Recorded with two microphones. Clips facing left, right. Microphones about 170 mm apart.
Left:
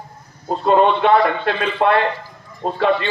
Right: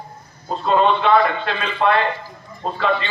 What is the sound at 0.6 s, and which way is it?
A man's voice, 55° left (ahead or behind).